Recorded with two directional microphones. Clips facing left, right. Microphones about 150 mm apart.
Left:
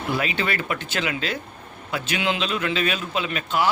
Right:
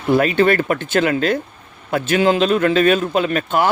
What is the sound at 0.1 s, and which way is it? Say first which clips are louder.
A man's voice: right 12 dB; 50° right (ahead or behind).